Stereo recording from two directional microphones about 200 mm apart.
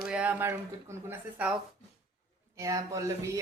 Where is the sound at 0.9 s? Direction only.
15° right (ahead or behind).